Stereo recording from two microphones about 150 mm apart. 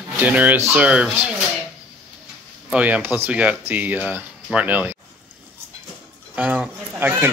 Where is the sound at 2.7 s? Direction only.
5° right (ahead or behind).